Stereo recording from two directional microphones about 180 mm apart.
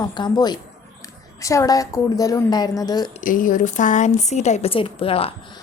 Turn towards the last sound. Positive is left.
turn(degrees=30)  # may be behind; listen again after turning